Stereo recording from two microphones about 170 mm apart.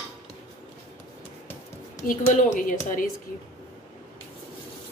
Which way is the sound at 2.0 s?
50° left (ahead or behind).